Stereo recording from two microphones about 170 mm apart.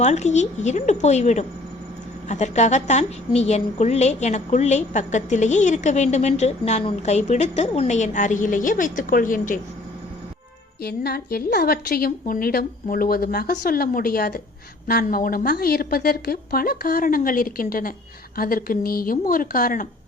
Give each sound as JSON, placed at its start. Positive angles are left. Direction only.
{"t": 0.0, "sound": "a woman's voice", "side_deg": 45}
{"t": 10.8, "sound": "a woman's voice", "side_deg": 65}